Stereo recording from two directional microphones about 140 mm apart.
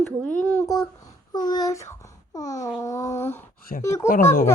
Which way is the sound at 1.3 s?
30° left (ahead or behind).